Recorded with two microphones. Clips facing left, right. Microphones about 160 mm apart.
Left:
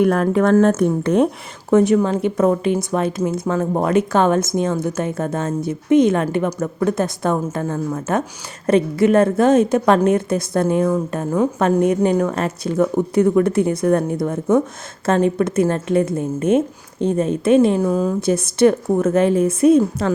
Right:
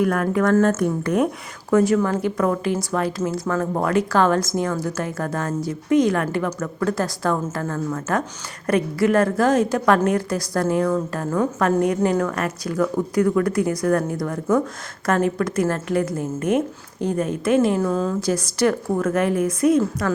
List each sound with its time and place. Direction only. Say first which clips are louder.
0.0 s speech: left 4 dB; 30° left (ahead or behind)
0.5 s speech: left 4 dB; 15° left (ahead or behind)